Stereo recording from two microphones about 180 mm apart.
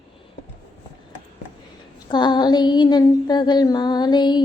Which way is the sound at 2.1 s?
25° left (ahead or behind).